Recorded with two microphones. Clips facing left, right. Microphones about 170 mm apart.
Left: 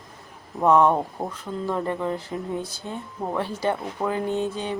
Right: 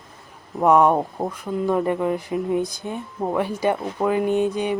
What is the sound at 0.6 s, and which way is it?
Speech, 15° right (ahead or behind).